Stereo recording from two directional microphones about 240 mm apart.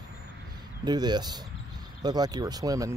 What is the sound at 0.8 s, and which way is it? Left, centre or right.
Speech, centre.